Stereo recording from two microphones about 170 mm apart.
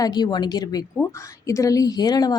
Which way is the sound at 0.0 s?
25° left (ahead or behind).